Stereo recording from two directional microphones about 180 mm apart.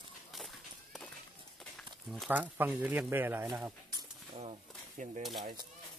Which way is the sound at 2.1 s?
5° right (ahead or behind).